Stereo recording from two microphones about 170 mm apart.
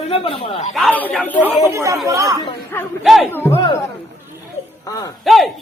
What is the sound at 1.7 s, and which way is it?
Speech, 15° right (ahead or behind).